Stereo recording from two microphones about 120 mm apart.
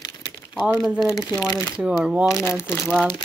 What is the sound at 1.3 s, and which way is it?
Speech, 30° left (ahead or behind).